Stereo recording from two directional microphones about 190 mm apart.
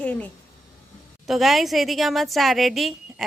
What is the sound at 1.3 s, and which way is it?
Speech, centre (ahead or behind).